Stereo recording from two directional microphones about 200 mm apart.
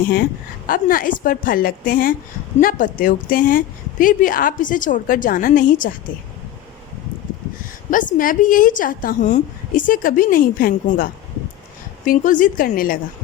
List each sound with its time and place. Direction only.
0.7 s a woman's voice: 45° left (ahead or behind)
7.9 s a woman's voice: 40° left (ahead or behind)